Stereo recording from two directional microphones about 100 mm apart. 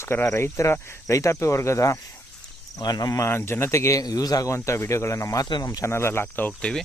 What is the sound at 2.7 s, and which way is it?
Speech, 40° left (ahead or behind).